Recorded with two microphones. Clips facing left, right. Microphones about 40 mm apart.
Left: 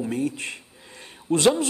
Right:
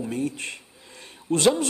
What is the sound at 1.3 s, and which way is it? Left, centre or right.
Speech, left.